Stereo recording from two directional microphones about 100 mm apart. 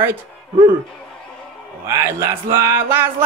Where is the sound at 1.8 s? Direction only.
30° right (ahead or behind).